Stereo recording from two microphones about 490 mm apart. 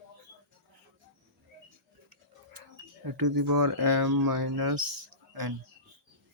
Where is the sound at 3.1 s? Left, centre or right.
Right.